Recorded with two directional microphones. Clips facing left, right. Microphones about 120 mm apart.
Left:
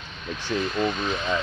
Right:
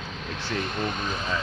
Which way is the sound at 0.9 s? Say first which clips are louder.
Left 3 dB; 45° right (ahead or behind).